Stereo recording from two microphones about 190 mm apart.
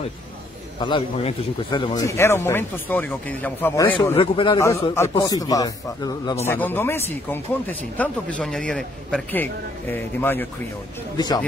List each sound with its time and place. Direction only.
0.7 s a man's voice: 25° left (ahead or behind)
2.0 s speech: 15° left (ahead or behind)
4.2 s a man's voice: 30° left (ahead or behind)
4.9 s a man's voice: 15° left (ahead or behind)
11.1 s a man's voice: 20° left (ahead or behind)